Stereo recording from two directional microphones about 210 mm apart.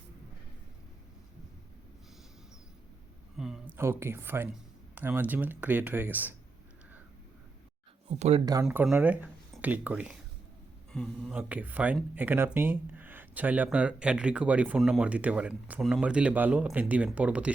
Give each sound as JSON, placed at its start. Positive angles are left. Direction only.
{"t": 3.3, "sound": "speech", "side_deg": 0}
{"t": 8.6, "sound": "speech", "side_deg": -5}